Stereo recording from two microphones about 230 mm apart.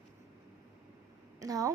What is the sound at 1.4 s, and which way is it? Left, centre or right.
Speech, centre.